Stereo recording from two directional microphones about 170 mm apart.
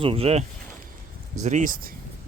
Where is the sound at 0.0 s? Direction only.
35° right (ahead or behind).